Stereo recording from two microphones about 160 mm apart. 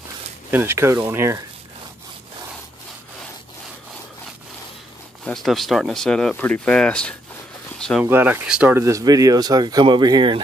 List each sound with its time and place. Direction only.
0.5 s speech: 15° right (ahead or behind)
5.2 s speech: centre (ahead or behind)
8.0 s speech: 10° right (ahead or behind)
8.7 s speech: 20° right (ahead or behind)